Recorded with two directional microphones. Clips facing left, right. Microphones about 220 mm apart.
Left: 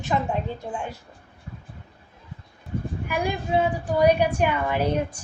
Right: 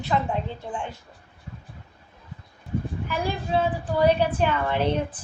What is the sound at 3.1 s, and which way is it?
A woman's voice, 15° left (ahead or behind).